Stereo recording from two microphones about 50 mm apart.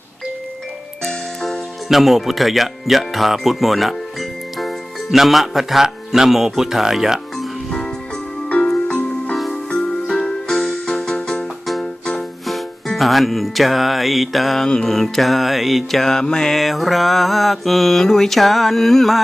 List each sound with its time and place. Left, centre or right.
1.0 s music: centre
1.9 s speech: centre
8.6 s music: centre
9.3 s music: centre
9.6 s music: centre
11.6 s music: centre
14.8 s mantra: centre
16.6 s mantra: centre